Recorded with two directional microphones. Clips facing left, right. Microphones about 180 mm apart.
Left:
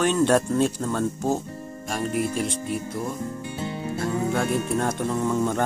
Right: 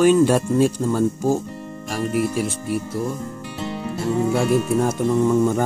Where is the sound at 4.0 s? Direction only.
10° right (ahead or behind).